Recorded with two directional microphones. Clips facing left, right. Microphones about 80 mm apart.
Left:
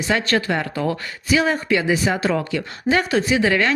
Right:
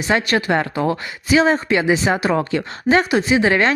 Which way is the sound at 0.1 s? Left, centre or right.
Right.